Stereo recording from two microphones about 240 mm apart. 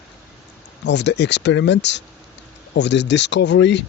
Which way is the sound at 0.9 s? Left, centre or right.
Left.